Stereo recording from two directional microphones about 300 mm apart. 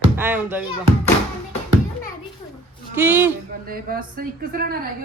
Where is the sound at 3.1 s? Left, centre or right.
Centre.